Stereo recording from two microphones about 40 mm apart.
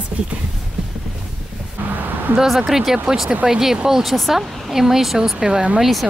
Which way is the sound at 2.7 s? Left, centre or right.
Centre.